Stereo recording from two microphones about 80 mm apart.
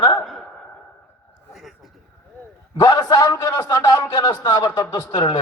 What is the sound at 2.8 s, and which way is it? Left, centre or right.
A man's voice, left.